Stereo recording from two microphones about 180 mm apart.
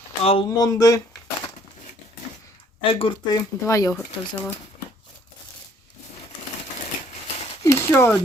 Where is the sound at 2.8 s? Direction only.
30° left (ahead or behind).